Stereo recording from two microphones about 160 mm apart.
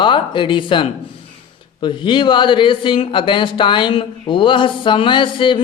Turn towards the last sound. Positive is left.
turn(degrees=30)  # may be behind; listen again after turning